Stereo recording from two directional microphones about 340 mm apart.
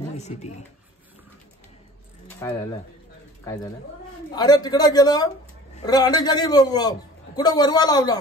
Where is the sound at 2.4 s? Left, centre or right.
Centre.